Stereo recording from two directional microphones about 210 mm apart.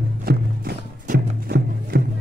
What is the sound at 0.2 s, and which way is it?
Music, 45° right (ahead or behind).